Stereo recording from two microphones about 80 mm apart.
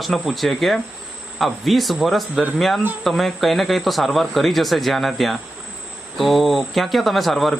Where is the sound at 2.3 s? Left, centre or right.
Centre.